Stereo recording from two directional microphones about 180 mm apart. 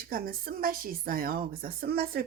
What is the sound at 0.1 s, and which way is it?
Speech, 55° right (ahead or behind).